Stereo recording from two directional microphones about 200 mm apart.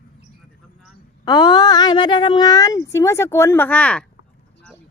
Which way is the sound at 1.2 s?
20° left (ahead or behind).